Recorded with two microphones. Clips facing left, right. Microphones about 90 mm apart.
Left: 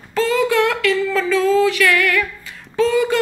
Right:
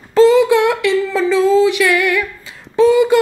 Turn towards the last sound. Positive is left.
turn(degrees=-15)  # may be behind; listen again after turning